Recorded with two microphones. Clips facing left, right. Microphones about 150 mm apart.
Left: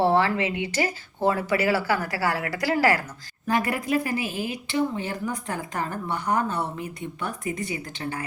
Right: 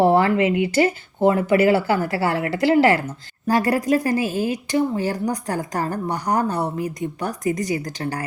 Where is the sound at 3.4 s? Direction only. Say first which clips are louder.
Right 6 dB; 35° right (ahead or behind).